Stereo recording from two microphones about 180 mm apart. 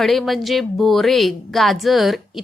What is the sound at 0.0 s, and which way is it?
Speech, centre (ahead or behind).